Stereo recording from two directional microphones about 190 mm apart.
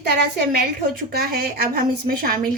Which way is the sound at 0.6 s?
55° right (ahead or behind).